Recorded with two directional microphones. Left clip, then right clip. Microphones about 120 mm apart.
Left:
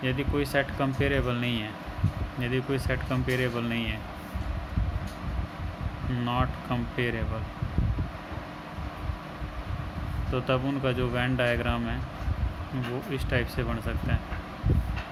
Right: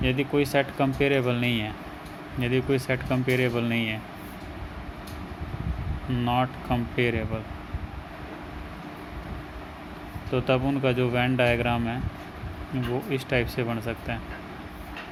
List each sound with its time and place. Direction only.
0.0 s speech: 30° right (ahead or behind)
6.2 s speech: 25° right (ahead or behind)
10.3 s speech: 25° right (ahead or behind)
13.1 s speech: 25° right (ahead or behind)